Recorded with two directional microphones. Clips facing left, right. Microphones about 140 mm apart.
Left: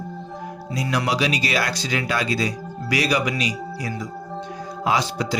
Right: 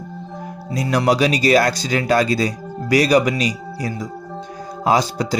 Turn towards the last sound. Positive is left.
turn(degrees=-40)  # may be behind; listen again after turning